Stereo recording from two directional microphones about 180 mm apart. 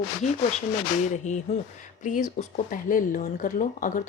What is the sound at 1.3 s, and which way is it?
A woman's voice, 40° left (ahead or behind).